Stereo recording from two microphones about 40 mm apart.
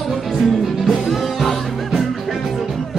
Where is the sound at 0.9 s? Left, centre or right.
Centre.